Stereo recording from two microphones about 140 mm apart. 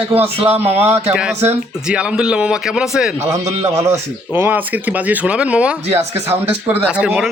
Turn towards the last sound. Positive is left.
turn(degrees=-5)  # may be behind; listen again after turning